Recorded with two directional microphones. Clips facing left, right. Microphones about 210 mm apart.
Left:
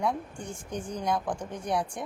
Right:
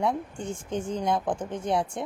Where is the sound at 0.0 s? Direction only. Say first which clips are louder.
Right 3 dB; 25° right (ahead or behind).